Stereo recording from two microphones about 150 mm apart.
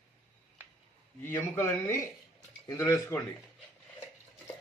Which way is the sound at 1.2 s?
15° left (ahead or behind).